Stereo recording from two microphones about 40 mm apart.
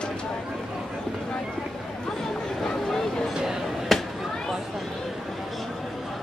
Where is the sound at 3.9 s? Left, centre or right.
Centre.